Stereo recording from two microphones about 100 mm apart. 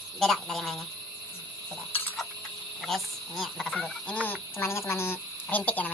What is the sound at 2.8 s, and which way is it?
Speech, centre (ahead or behind).